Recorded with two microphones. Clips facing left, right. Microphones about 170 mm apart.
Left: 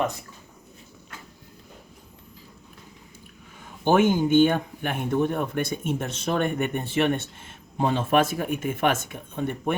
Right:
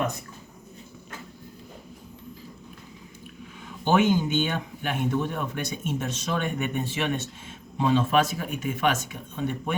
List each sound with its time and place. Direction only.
3.8 s speech: 50° left (ahead or behind)